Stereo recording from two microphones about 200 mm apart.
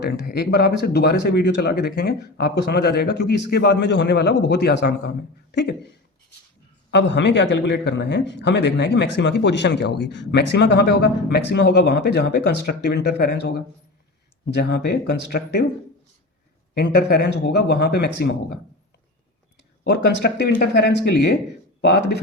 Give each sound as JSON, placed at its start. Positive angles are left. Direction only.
{"t": 0.0, "sound": "a man's voice", "side_deg": 55}
{"t": 6.9, "sound": "a man's voice", "side_deg": 60}
{"t": 16.7, "sound": "a man's voice", "side_deg": 55}
{"t": 19.8, "sound": "a man's voice", "side_deg": 55}